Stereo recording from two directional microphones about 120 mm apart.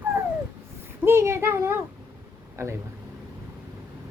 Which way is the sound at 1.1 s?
20° right (ahead or behind).